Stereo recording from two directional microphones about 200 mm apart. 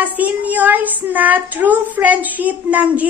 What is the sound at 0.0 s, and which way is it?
Speech, 10° right (ahead or behind).